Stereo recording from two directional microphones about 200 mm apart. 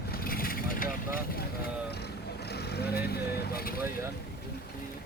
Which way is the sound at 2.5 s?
55° left (ahead or behind).